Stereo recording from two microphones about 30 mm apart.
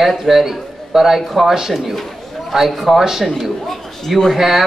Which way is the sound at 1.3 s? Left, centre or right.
Centre.